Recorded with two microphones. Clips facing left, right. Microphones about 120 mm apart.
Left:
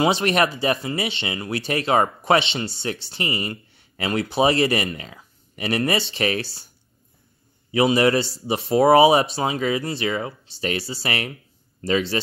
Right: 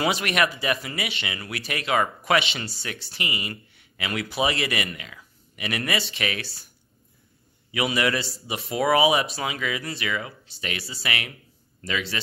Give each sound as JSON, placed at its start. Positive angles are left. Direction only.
{"t": 0.0, "sound": "speech", "side_deg": 30}
{"t": 7.7, "sound": "speech", "side_deg": 30}